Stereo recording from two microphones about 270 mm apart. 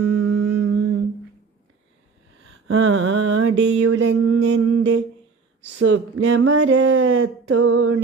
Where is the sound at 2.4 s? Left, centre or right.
Right.